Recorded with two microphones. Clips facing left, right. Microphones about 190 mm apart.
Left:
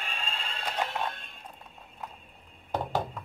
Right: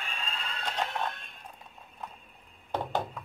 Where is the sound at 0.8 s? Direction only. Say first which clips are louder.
Left 1 dB; centre (ahead or behind).